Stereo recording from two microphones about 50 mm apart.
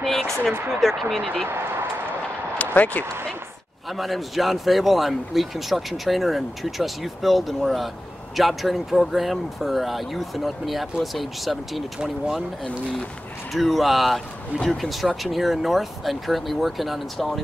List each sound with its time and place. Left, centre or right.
0.0 s a man's voice: centre
1.5 s speech: right
2.6 s speech: left
3.9 s a man's voice: centre
13.5 s a man's voice: centre